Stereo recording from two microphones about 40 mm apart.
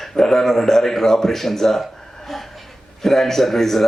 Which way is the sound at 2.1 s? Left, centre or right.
Centre.